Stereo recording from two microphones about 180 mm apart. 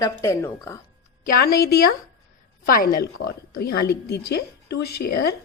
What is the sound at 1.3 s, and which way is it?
A woman's voice, 55° left (ahead or behind).